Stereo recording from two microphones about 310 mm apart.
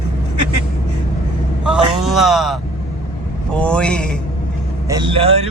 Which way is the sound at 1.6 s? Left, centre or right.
Centre.